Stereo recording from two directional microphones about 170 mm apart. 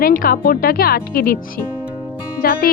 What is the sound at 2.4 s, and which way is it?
Speech, 60° left (ahead or behind).